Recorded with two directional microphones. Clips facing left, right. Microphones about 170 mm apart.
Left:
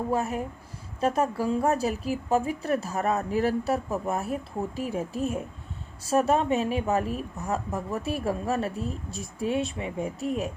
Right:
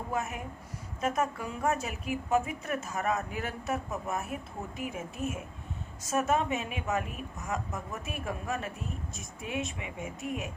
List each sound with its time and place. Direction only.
0.1 s a woman's voice: 35° left (ahead or behind)